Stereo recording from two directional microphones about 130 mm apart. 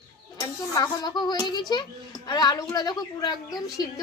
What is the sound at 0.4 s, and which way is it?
Speech, 25° left (ahead or behind).